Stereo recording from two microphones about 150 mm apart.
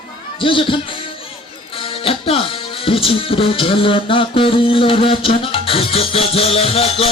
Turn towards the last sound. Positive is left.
turn(degrees=40)  # may be behind; listen again after turning